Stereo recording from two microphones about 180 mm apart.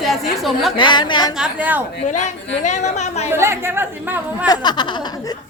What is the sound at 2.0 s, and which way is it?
Speech, 40° left (ahead or behind).